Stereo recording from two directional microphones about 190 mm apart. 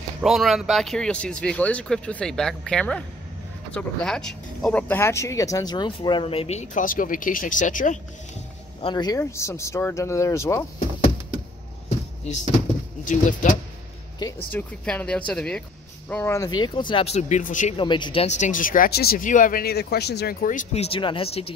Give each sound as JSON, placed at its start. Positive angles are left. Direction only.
{"t": 0.2, "sound": "speech", "side_deg": 0}
{"t": 8.8, "sound": "speech", "side_deg": 20}
{"t": 12.2, "sound": "speech", "side_deg": 35}
{"t": 14.5, "sound": "speech", "side_deg": 5}
{"t": 17.7, "sound": "speech", "side_deg": 25}